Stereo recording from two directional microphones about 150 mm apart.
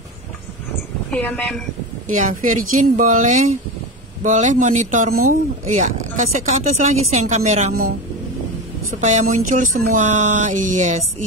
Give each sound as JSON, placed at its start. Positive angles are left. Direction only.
{"t": 1.1, "sound": "a woman's voice", "side_deg": 5}
{"t": 2.0, "sound": "speech", "side_deg": -60}
{"t": 9.0, "sound": "speech", "side_deg": -55}